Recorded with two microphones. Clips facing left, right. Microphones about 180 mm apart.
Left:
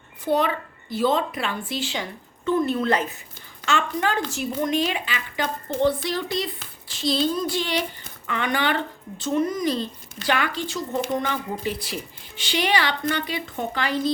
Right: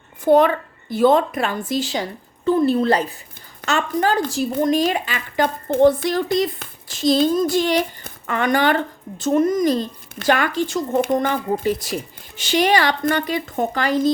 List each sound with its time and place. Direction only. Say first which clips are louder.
0.3 s a woman's voice: right 8 dB; 50° right (ahead or behind)